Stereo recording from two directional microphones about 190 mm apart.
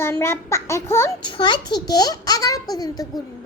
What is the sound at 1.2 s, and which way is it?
A child's voice, 25° left (ahead or behind).